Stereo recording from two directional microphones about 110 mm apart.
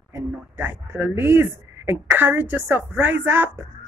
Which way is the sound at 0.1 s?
20° right (ahead or behind).